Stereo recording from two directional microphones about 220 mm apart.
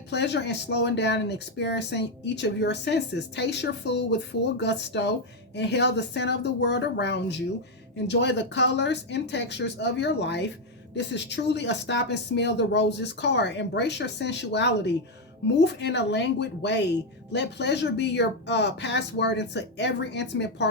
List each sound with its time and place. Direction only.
0.1 s speech: 50° left (ahead or behind)